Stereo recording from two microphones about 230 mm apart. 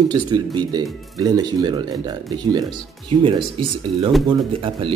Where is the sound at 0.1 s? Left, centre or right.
Centre.